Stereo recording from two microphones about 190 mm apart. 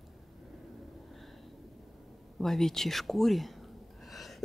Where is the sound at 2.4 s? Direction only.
Centre (ahead or behind).